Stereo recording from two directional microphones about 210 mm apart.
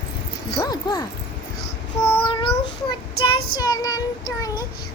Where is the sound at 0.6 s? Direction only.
20° left (ahead or behind).